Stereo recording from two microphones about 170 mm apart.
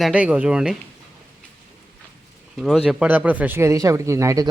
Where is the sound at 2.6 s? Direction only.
5° right (ahead or behind).